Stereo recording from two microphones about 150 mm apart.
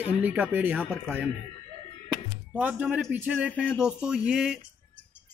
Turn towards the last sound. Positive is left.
turn(degrees=-5)  # may be behind; listen again after turning